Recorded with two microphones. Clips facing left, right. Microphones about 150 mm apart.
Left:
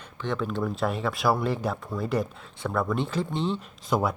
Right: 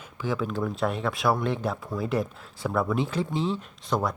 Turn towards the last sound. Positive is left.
turn(degrees=5)  # may be behind; listen again after turning